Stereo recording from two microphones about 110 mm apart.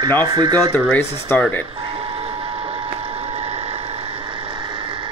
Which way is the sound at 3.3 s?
80° right.